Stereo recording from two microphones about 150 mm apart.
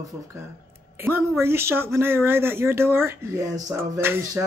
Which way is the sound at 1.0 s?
15° right (ahead or behind).